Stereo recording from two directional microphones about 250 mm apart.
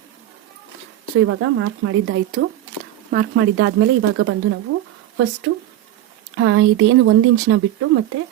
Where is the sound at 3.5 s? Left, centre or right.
Right.